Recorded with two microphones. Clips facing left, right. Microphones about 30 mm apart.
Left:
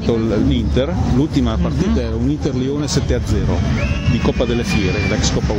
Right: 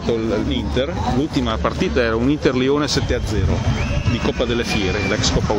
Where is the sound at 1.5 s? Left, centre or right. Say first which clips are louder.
Left 1 dB; right.